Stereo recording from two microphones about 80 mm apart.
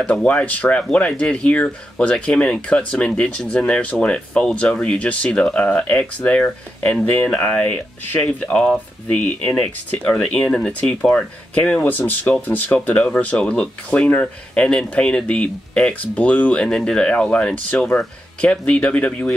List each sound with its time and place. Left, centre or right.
0.0 s speech: centre
8.4 s speech: centre
12.7 s speech: centre